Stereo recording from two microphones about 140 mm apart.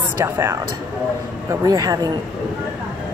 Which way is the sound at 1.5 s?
25° right (ahead or behind).